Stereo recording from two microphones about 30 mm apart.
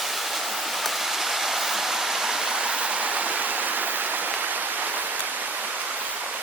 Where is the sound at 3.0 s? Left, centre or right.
Right.